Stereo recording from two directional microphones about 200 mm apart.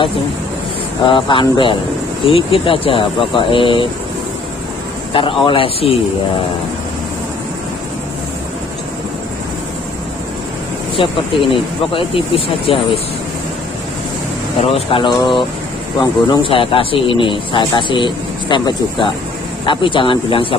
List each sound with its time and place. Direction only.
1.0 s speech: 25° left (ahead or behind)
5.4 s speech: 25° left (ahead or behind)
11.0 s speech: 25° left (ahead or behind)
14.6 s speech: 30° left (ahead or behind)